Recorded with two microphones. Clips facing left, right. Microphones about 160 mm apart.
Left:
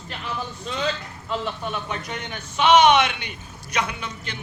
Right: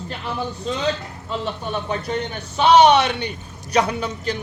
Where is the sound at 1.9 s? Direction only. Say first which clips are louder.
Right 7 dB; 35° right (ahead or behind).